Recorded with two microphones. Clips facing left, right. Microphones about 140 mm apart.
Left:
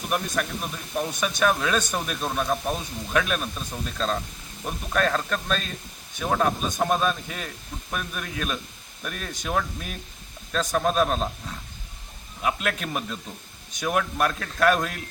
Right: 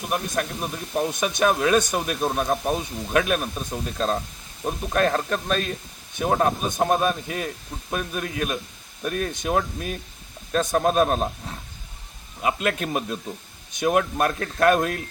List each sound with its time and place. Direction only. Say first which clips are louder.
0.1 s speech: right 1 dB; 25° right (ahead or behind)
12.4 s speech: right 3 dB; 20° right (ahead or behind)